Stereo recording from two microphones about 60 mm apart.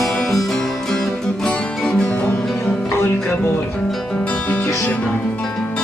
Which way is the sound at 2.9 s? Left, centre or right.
Left.